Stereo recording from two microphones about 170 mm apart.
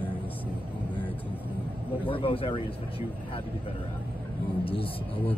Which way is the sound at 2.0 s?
30° left (ahead or behind).